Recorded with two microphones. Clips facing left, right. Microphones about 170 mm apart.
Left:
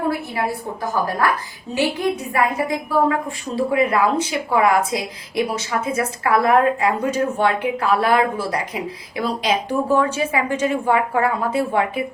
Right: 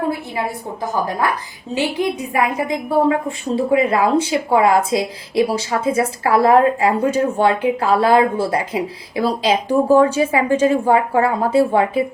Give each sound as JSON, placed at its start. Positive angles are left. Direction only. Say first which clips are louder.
{"t": 2.3, "sound": "a woman's voice", "louder": "right 1 dB", "side_deg": -20}